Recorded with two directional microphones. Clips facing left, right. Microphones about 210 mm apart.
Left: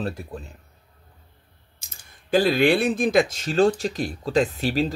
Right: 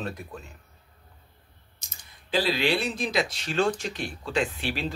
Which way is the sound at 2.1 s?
50° left (ahead or behind).